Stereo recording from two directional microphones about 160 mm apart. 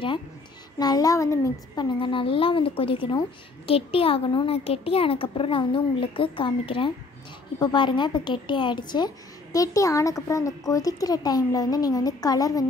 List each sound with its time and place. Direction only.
0.7 s a child's voice: 25° left (ahead or behind)